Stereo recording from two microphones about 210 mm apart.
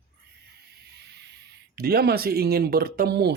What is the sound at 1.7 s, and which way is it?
Speech, 50° right (ahead or behind).